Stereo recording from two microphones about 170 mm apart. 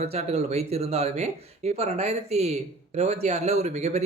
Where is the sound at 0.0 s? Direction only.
40° right (ahead or behind).